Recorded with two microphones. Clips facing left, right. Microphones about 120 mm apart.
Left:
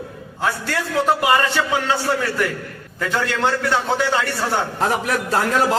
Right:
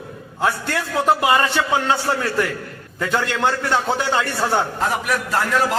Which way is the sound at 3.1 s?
15° right (ahead or behind).